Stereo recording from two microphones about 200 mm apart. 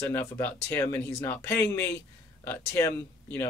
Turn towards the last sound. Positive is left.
turn(degrees=15)  # may be behind; listen again after turning